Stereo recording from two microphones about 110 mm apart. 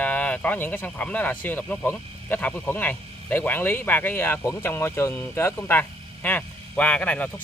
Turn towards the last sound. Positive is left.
turn(degrees=10)  # may be behind; listen again after turning